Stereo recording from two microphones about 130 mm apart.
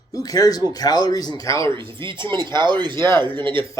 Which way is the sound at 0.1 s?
30° left (ahead or behind).